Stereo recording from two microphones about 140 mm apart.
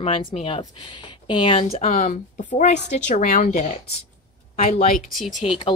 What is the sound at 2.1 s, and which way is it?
A woman's voice, 55° left (ahead or behind).